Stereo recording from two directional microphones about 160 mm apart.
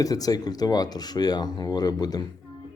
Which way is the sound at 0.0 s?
25° left (ahead or behind).